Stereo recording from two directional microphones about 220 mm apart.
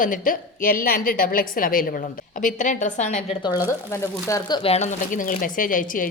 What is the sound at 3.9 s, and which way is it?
A woman's voice, 15° left (ahead or behind).